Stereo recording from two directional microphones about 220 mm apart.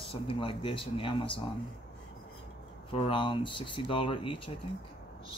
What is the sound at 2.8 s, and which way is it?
Speech, 25° left (ahead or behind).